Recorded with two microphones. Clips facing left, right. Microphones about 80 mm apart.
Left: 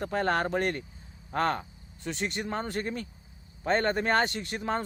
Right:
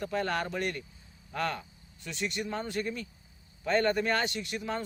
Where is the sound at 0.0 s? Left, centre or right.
Left.